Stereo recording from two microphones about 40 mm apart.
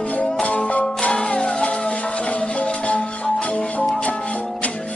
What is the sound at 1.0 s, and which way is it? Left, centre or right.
Music, left.